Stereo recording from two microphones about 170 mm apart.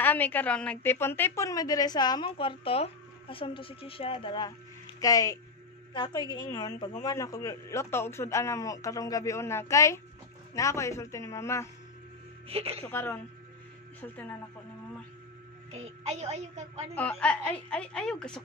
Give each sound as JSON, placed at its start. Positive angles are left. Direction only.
{"t": 0.0, "sound": "a woman's voice", "side_deg": 10}
{"t": 12.4, "sound": "a woman's voice", "side_deg": -35}
{"t": 12.8, "sound": "a woman's voice", "side_deg": 10}
{"t": 15.7, "sound": "a woman's voice", "side_deg": -40}
{"t": 16.9, "sound": "a woman's voice", "side_deg": 5}